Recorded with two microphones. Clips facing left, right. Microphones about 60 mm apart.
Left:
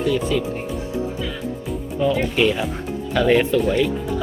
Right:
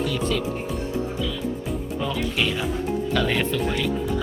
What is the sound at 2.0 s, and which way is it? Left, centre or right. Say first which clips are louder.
Speech: left 8 dB; centre.